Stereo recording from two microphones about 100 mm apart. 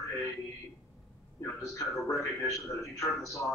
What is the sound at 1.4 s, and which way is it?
A man's voice, 30° left (ahead or behind).